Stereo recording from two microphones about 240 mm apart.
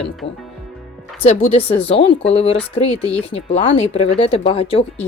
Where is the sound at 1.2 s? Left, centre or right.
Left.